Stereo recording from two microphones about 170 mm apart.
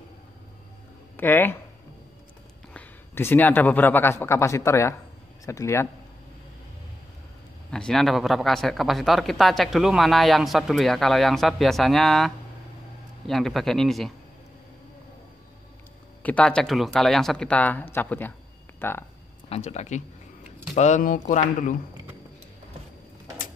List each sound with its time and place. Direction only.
1.1 s speech: 10° left (ahead or behind)
2.7 s a man's voice: 10° left (ahead or behind)
7.7 s speech: 5° left (ahead or behind)
13.3 s speech: centre (ahead or behind)
16.2 s speech: 10° left (ahead or behind)
19.5 s speech: 40° left (ahead or behind)